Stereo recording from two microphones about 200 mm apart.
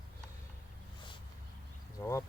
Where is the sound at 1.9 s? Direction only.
15° left (ahead or behind).